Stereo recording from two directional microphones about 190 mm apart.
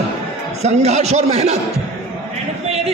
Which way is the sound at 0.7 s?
35° right (ahead or behind).